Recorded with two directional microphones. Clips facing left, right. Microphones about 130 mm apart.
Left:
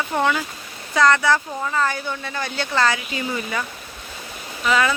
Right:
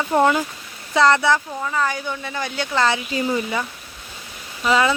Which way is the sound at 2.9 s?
35° right (ahead or behind).